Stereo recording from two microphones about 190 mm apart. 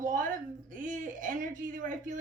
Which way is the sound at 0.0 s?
45° right (ahead or behind).